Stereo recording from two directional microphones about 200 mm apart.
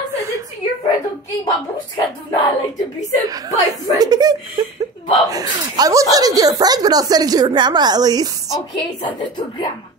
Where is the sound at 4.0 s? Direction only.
20° right (ahead or behind).